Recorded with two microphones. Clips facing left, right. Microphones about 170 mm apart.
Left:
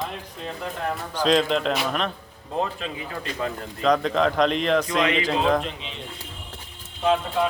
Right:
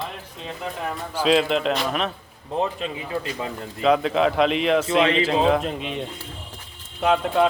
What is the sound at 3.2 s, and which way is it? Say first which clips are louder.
A man's voice: left 1 dB; 10° right (ahead or behind).